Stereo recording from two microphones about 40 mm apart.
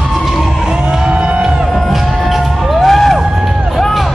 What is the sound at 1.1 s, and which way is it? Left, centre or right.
Music, right.